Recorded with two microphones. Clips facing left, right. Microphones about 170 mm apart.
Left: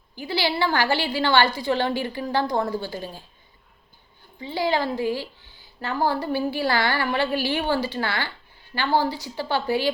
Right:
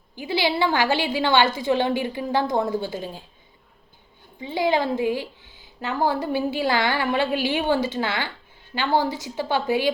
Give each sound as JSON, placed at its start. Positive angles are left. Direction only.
{"t": 0.2, "sound": "a woman's voice", "side_deg": -20}
{"t": 4.4, "sound": "a woman's voice", "side_deg": -20}